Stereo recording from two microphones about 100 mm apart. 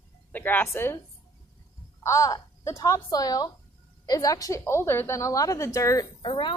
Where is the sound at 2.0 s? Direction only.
30° left (ahead or behind).